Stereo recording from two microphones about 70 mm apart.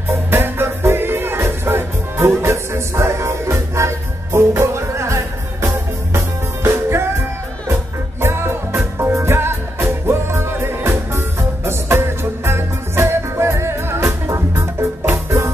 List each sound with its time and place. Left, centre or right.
0.3 s music: right